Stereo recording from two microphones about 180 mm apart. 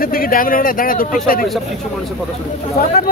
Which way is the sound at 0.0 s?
55° left (ahead or behind).